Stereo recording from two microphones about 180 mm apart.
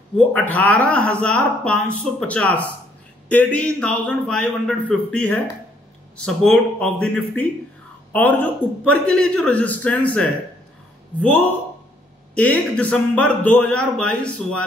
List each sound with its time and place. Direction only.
0.3 s a woman's voice: 10° left (ahead or behind)